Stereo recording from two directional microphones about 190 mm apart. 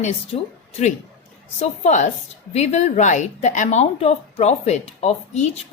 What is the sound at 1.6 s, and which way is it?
Speech, 35° left (ahead or behind).